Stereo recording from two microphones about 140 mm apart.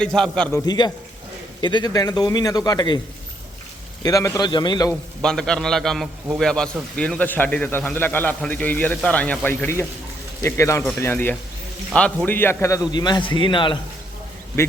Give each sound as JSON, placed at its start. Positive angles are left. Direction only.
{"t": 0.0, "sound": "a man's voice", "side_deg": 5}
{"t": 0.5, "sound": "a man's voice", "side_deg": 30}
{"t": 4.0, "sound": "a man's voice", "side_deg": 25}
{"t": 5.2, "sound": "a man's voice", "side_deg": 5}